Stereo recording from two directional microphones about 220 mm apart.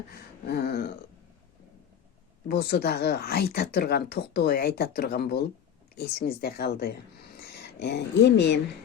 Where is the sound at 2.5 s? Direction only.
45° left (ahead or behind).